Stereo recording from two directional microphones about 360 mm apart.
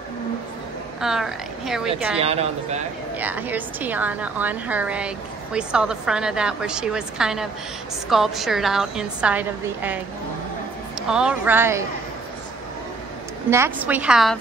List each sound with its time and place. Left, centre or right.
1.0 s a woman's voice: centre
2.1 s speech: centre
3.2 s a woman's voice: centre
11.1 s a woman's voice: centre
13.5 s a woman's voice: centre